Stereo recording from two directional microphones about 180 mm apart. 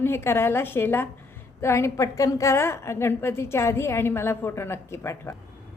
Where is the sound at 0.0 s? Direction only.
15° left (ahead or behind).